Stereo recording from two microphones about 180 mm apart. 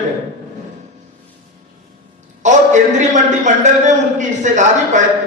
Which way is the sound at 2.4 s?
40° right (ahead or behind).